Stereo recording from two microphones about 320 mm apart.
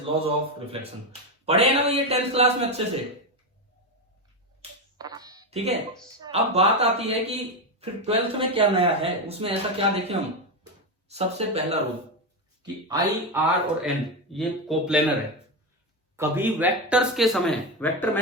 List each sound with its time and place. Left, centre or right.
0.0 s a man's voice: centre
4.9 s a sound: centre
6.1 s a man's voice: centre
13.8 s speech: centre
16.1 s speech: centre